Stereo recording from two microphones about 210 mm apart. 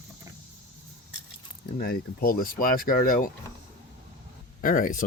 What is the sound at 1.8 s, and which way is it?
Speech, 45° left (ahead or behind).